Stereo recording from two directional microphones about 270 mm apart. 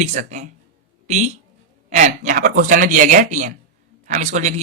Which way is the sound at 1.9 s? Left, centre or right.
Right.